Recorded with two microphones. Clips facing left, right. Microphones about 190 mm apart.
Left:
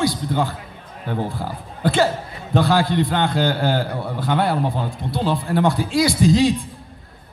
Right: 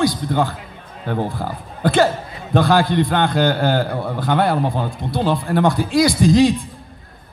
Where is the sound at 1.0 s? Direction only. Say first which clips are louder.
Right 3 dB; 55° right (ahead or behind).